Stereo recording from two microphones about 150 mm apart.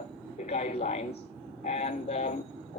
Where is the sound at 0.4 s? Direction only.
55° left (ahead or behind).